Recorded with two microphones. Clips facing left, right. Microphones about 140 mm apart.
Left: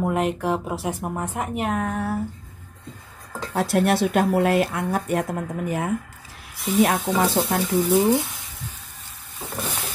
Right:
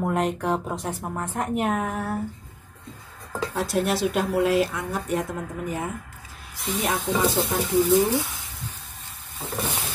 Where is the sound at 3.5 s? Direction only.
60° left (ahead or behind).